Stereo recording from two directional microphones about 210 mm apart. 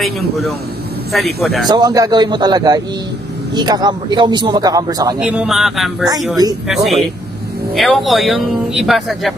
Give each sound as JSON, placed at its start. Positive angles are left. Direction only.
{"t": 1.1, "sound": "speech", "side_deg": 0}
{"t": 1.7, "sound": "a man's voice", "side_deg": -20}
{"t": 5.2, "sound": "speech", "side_deg": -5}